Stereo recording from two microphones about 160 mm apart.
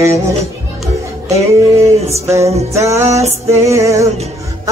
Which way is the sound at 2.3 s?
20° right (ahead or behind).